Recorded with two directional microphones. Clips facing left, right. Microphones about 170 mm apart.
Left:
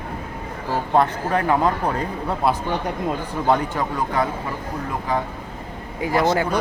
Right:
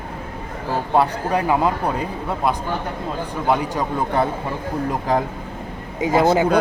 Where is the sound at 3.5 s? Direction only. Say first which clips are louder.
Even; 10° right (ahead or behind).